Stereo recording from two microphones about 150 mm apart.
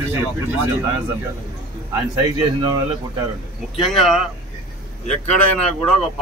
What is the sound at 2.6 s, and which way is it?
Speech, 25° right (ahead or behind).